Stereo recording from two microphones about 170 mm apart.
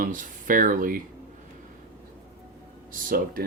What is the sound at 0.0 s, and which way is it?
Speech, 55° right (ahead or behind).